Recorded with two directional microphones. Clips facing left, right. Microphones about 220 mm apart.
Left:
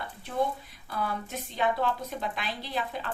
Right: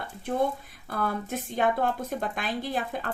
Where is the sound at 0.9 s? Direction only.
50° right (ahead or behind).